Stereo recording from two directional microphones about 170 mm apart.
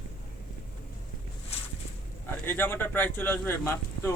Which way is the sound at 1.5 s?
35° left (ahead or behind).